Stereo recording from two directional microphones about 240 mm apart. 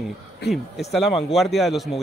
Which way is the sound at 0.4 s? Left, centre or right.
Left.